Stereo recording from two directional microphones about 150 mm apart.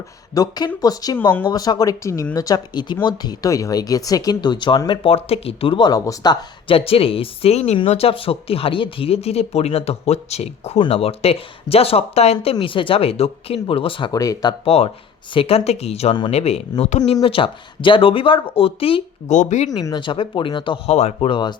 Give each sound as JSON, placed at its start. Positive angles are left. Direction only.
{"t": 0.3, "sound": "speech", "side_deg": 25}
{"t": 14.1, "sound": "speech", "side_deg": 25}
{"t": 14.6, "sound": "speech", "side_deg": 40}
{"t": 19.3, "sound": "speech", "side_deg": 50}
{"t": 19.7, "sound": "speech", "side_deg": 30}
{"t": 20.9, "sound": "speech", "side_deg": 45}